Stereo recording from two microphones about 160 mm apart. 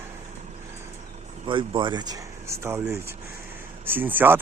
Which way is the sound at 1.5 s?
30° right (ahead or behind).